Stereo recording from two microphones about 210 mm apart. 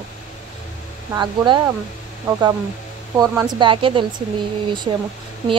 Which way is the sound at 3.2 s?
15° right (ahead or behind).